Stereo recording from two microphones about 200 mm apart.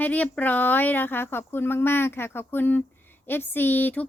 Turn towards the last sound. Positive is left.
turn(degrees=10)  # may be behind; listen again after turning